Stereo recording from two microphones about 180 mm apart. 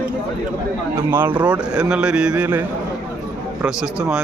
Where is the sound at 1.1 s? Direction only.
10° right (ahead or behind).